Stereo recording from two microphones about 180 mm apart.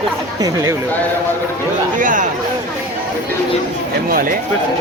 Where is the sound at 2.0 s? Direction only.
45° right (ahead or behind).